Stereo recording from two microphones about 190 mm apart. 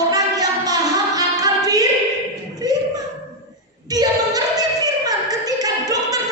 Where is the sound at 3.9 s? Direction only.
20° right (ahead or behind).